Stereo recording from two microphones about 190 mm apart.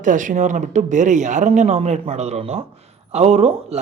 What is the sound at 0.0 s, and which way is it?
A man's voice, 40° right (ahead or behind).